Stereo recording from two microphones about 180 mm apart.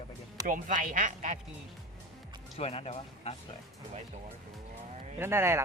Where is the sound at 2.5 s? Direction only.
35° left (ahead or behind).